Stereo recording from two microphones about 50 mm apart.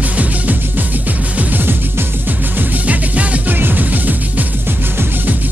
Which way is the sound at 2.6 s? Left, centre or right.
Right.